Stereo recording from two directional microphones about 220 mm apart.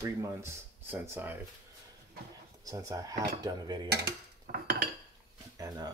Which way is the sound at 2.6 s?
15° right (ahead or behind).